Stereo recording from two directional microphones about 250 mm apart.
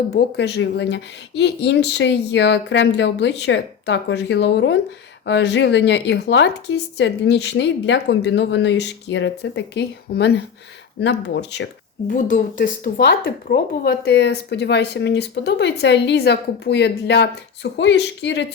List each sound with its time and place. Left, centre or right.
0.2 s speech: left
12.1 s speech: left